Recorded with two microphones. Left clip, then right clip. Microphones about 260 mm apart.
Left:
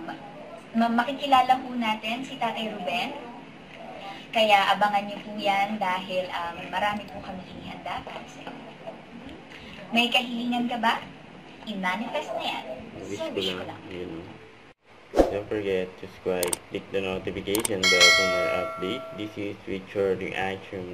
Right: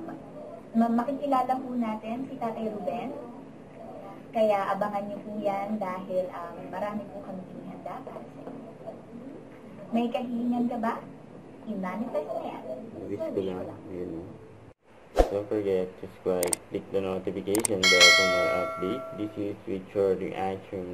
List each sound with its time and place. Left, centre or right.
0.7 s a woman's voice: centre
4.3 s a woman's voice: centre
9.9 s a woman's voice: centre
15.1 s speech: centre